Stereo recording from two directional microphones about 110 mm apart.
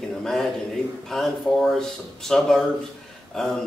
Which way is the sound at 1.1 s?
5° left (ahead or behind).